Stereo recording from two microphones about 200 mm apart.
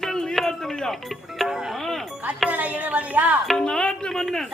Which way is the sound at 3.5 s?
5° left (ahead or behind).